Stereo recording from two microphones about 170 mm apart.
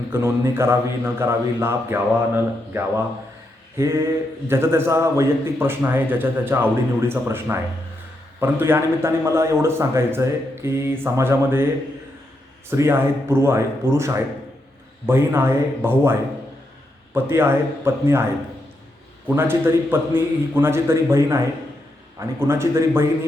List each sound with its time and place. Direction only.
0.1 s a man's voice: 15° right (ahead or behind)
12.7 s a man's voice: 15° right (ahead or behind)
17.2 s a man's voice: 15° right (ahead or behind)
19.4 s a man's voice: 15° right (ahead or behind)